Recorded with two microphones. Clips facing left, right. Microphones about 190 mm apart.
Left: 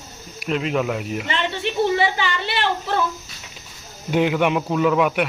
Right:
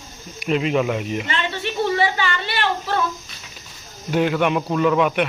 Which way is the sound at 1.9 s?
20° left (ahead or behind).